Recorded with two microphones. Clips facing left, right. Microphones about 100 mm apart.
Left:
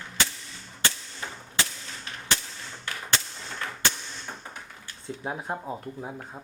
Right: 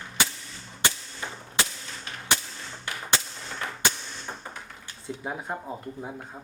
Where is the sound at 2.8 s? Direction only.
15° right (ahead or behind).